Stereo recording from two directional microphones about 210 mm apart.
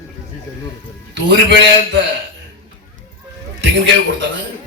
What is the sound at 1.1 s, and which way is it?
Speech, 55° right (ahead or behind).